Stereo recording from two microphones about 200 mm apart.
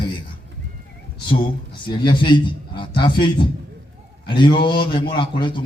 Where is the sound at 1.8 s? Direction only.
25° left (ahead or behind).